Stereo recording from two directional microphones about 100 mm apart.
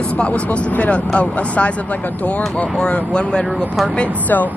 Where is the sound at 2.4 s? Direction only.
5° left (ahead or behind).